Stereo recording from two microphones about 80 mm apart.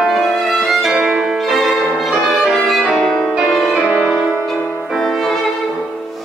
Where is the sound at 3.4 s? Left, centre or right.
Centre.